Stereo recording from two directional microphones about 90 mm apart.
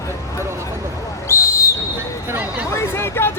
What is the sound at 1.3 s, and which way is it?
Whistle, 30° left (ahead or behind).